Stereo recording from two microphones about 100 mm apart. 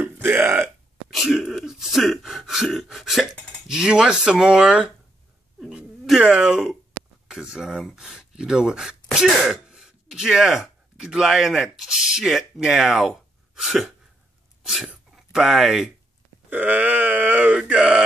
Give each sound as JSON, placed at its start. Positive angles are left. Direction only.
{"t": 0.0, "sound": "burping", "side_deg": -20}
{"t": 1.1, "sound": "a sound", "side_deg": 0}
{"t": 5.6, "sound": "cat", "side_deg": -5}
{"t": 7.2, "sound": "speech", "side_deg": -10}
{"t": 14.6, "sound": "sneeze", "side_deg": -5}
{"t": 15.3, "sound": "speech", "side_deg": 0}
{"t": 16.4, "sound": "a sound", "side_deg": -15}